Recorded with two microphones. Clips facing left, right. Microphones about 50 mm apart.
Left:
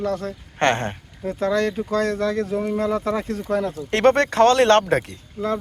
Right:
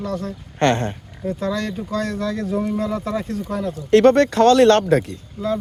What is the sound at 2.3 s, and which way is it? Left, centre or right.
Speech, left.